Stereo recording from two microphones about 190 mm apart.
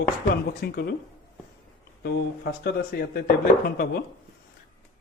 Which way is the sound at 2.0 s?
60° left (ahead or behind).